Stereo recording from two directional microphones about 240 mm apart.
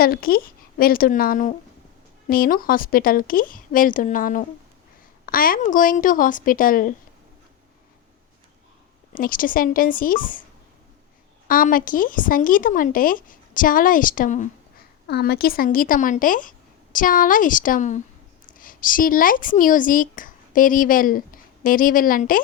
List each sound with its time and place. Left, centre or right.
0.0 s a woman's voice: left
9.1 s a woman's voice: left
11.4 s a woman's voice: left